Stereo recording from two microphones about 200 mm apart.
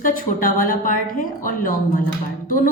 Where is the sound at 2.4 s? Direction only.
45° left (ahead or behind).